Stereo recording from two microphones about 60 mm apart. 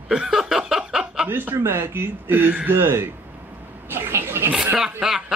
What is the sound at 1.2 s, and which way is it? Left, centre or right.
A man's voice, right.